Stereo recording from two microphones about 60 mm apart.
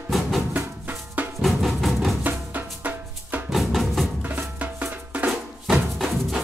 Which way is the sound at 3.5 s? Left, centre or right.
Centre.